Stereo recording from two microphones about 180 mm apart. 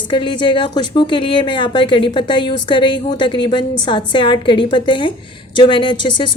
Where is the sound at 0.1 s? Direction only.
25° left (ahead or behind).